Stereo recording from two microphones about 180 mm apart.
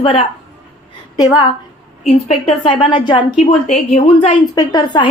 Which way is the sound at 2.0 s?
35° left (ahead or behind).